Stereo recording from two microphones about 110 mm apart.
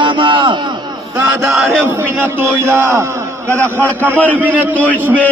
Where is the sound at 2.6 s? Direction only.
20° right (ahead or behind).